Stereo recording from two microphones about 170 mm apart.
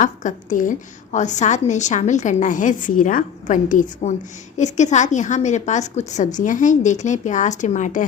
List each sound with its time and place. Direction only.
0.0 s a woman's voice: 50° left (ahead or behind)